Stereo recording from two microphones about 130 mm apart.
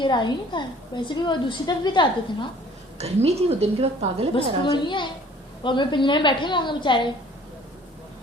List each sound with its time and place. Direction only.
0.0 s a woman's voice: 35° left (ahead or behind)
3.0 s a woman's voice: 55° right (ahead or behind)
4.4 s a woman's voice: 40° left (ahead or behind)